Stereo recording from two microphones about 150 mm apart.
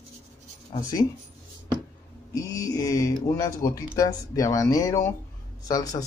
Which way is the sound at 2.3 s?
25° left (ahead or behind).